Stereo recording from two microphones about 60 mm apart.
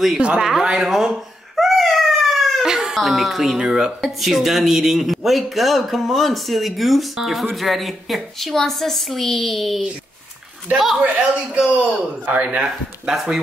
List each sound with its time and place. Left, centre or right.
0.2 s speech: centre
0.5 s speech: centre
1.6 s a sound: centre
2.6 s a sound: centre
3.5 s speech: centre
11.0 s a man's voice: centre
12.4 s speech: centre